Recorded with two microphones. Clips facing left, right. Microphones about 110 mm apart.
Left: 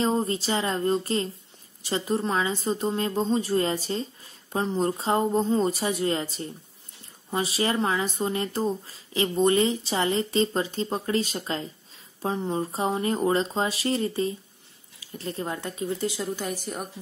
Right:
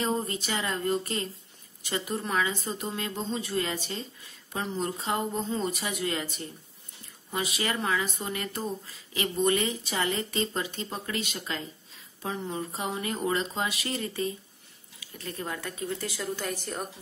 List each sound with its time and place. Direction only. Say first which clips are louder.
0.0 s speech: left 5 dB; 30° left (ahead or behind)